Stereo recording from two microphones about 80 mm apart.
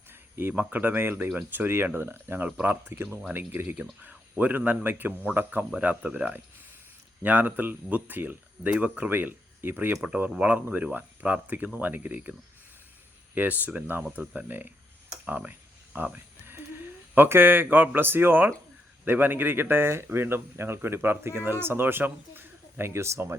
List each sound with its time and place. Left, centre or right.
0.1 s a sound: right
0.7 s speech: right
10.0 s speech: centre
13.3 s speech: right
15.2 s a sound: centre
17.2 s speech: right